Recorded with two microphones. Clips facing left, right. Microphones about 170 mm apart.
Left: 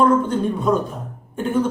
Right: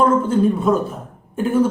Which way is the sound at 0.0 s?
5° right (ahead or behind).